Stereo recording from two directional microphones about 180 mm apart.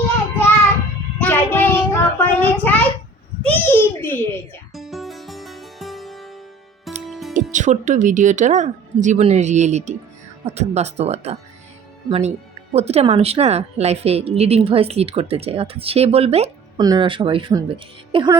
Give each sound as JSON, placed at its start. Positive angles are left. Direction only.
{"t": 1.2, "sound": "a sound", "side_deg": 10}
{"t": 4.7, "sound": "music", "side_deg": 0}
{"t": 7.5, "sound": "a woman's voice", "side_deg": -45}
{"t": 16.7, "sound": "speech", "side_deg": -20}